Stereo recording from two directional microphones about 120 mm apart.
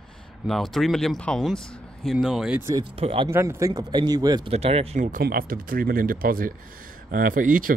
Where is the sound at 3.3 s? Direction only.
25° right (ahead or behind).